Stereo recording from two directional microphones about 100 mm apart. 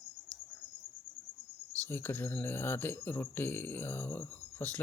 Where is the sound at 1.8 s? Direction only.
20° left (ahead or behind).